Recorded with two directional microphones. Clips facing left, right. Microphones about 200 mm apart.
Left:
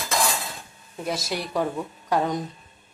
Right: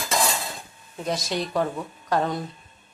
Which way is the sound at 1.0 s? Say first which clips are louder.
Right 2 dB; 5° left (ahead or behind).